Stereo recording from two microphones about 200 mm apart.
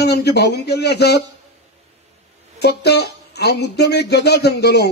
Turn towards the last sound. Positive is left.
turn(degrees=55)  # may be behind; listen again after turning